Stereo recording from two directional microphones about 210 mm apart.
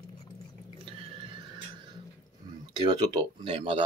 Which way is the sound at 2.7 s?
20° right (ahead or behind).